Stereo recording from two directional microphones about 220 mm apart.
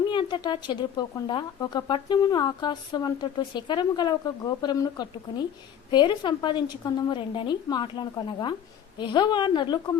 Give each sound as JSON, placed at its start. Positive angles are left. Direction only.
{"t": 0.1, "sound": "speech", "side_deg": 20}